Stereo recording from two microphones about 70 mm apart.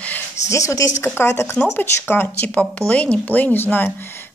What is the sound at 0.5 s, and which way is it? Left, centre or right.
Speech, left.